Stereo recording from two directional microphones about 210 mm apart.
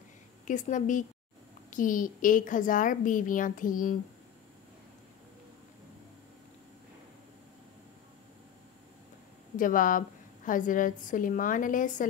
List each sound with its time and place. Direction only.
0.5 s a woman's voice: 35° left (ahead or behind)
9.6 s a woman's voice: 40° left (ahead or behind)